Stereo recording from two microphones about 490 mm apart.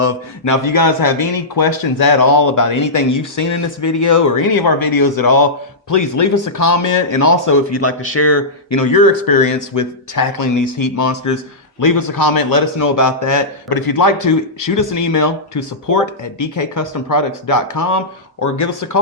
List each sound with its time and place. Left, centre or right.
0.0 s speech: left